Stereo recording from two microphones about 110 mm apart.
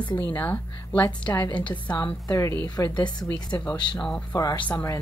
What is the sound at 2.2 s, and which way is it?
Speech, 30° left (ahead or behind).